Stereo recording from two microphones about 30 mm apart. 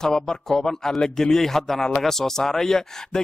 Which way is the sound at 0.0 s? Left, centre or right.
Centre.